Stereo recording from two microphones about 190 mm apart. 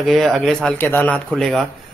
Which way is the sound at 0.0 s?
Centre (ahead or behind).